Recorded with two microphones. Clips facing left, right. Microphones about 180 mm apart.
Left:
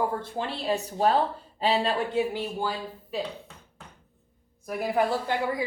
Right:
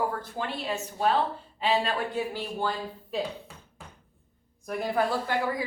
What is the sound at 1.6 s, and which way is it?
Speech, 25° left (ahead or behind).